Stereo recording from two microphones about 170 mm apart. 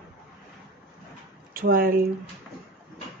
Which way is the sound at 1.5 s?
60° right (ahead or behind).